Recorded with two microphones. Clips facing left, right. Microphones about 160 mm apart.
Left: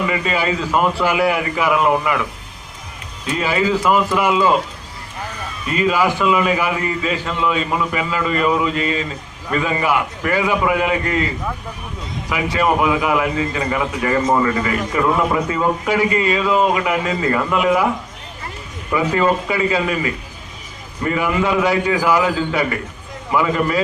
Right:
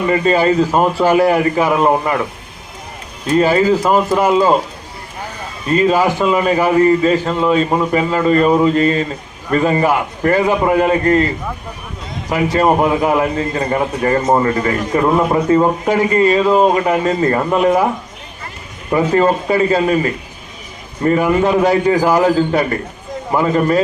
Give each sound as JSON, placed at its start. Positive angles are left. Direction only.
{"t": 0.0, "sound": "a man's voice", "side_deg": -40}
{"t": 3.2, "sound": "a man's voice", "side_deg": -40}
{"t": 5.6, "sound": "a man's voice", "side_deg": -40}
{"t": 12.3, "sound": "a man's voice", "side_deg": -40}
{"t": 18.9, "sound": "a man's voice", "side_deg": -40}
{"t": 21.0, "sound": "a man's voice", "side_deg": -40}